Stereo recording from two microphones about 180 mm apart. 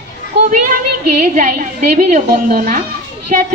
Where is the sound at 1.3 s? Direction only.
45° right (ahead or behind).